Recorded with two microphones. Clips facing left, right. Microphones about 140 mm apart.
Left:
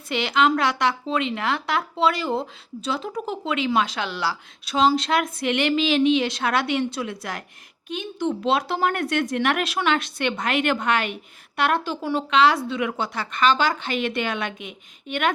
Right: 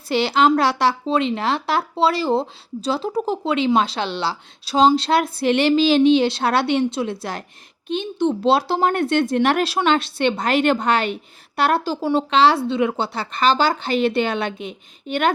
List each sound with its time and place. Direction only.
0.1 s speech: 35° right (ahead or behind)